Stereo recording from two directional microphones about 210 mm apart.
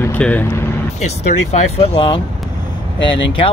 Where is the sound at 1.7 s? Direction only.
25° left (ahead or behind).